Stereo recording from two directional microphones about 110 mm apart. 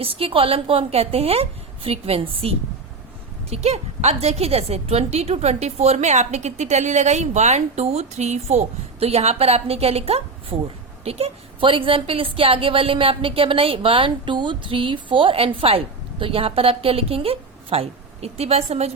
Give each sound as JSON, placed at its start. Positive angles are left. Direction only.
{"t": 0.0, "sound": "a woman's voice", "side_deg": -55}
{"t": 3.5, "sound": "a woman's voice", "side_deg": -75}
{"t": 10.5, "sound": "speech", "side_deg": -30}
{"t": 11.0, "sound": "a woman's voice", "side_deg": -65}